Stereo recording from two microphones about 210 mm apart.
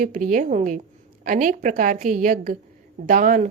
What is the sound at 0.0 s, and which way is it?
A woman's voice, 40° right (ahead or behind).